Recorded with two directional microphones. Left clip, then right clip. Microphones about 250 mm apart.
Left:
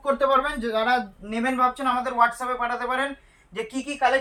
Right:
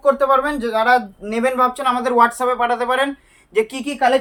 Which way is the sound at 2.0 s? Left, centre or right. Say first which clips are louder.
Right 9 dB; right.